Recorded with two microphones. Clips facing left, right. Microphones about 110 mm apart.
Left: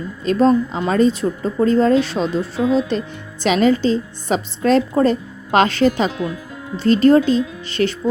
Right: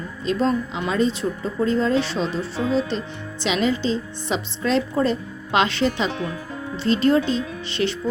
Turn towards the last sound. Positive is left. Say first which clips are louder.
# left 4 dB
turn(degrees=45)  # may be behind; listen again after turning